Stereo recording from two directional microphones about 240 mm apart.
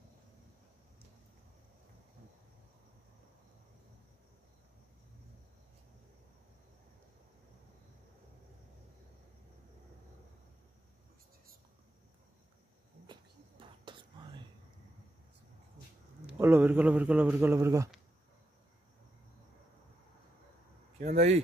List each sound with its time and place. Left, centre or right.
13.0 s whispering: centre
16.3 s speech: centre
21.0 s speech: right